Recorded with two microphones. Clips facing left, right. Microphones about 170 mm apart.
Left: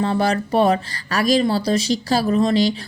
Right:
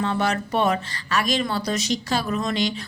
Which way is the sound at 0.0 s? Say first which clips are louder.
Left 4 dB; 35° left (ahead or behind).